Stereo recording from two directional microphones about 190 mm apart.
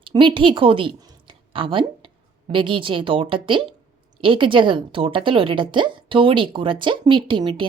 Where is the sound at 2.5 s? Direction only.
25° right (ahead or behind).